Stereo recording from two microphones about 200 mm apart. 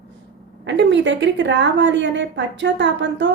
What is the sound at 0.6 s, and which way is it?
A woman's voice, 65° right (ahead or behind).